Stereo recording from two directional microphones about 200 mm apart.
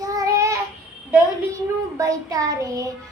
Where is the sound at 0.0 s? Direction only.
15° right (ahead or behind).